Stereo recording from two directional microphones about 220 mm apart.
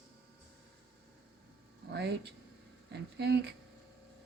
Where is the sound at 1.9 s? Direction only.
50° right (ahead or behind).